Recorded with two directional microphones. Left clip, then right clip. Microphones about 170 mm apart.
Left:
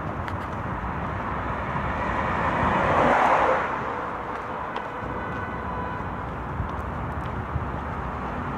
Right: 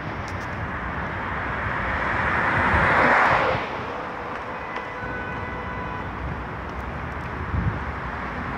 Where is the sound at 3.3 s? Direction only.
40° left (ahead or behind).